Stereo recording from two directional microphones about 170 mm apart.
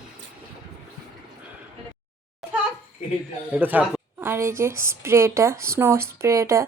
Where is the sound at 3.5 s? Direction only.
10° right (ahead or behind).